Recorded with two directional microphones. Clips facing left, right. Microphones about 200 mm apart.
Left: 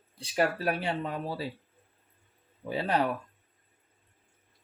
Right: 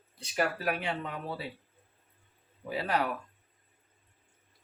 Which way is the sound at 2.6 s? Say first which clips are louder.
Left 2 dB; 30° left (ahead or behind).